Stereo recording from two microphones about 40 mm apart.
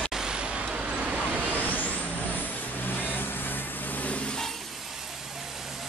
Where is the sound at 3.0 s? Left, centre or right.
Left.